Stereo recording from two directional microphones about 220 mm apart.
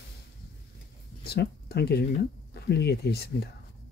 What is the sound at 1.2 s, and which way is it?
Speech, 45° left (ahead or behind).